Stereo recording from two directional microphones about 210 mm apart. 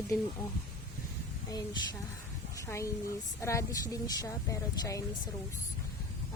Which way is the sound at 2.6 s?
15° left (ahead or behind).